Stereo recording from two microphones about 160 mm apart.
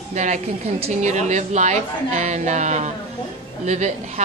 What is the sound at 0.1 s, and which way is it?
A woman's voice, 45° right (ahead or behind).